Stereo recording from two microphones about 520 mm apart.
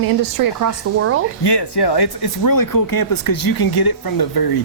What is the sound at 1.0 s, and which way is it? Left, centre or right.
Speech, right.